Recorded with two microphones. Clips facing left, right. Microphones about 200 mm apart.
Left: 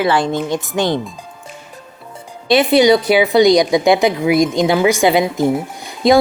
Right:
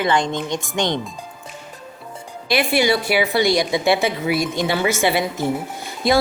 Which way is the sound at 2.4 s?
20° left (ahead or behind).